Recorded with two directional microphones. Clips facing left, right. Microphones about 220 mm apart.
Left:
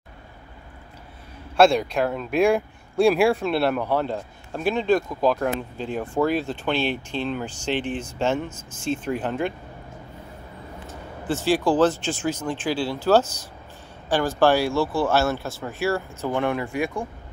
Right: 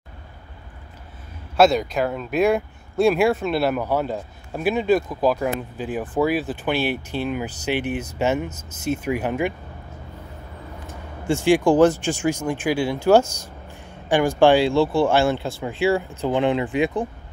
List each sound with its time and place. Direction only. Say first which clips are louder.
1.6 s speech: right 1 dB; 5° right (ahead or behind)
8.5 s speech: right 2 dB; 20° right (ahead or behind)
8.8 s speech: right 2 dB; 10° right (ahead or behind)
11.2 s speech: right 4 dB; 15° right (ahead or behind)